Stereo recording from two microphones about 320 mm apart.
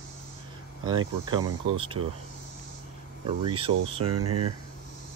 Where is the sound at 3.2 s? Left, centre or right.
Centre.